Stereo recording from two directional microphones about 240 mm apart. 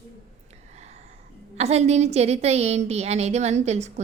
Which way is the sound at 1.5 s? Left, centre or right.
Right.